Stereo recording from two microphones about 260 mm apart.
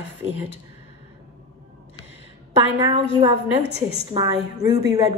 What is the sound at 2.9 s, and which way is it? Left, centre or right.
A woman's voice, right.